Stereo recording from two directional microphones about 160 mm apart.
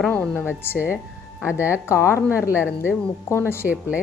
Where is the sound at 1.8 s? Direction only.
15° left (ahead or behind).